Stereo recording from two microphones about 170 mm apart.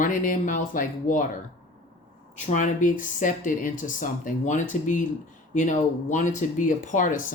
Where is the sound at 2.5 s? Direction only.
50° left (ahead or behind).